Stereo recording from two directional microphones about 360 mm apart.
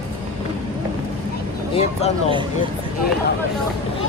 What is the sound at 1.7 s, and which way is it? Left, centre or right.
Speech, centre.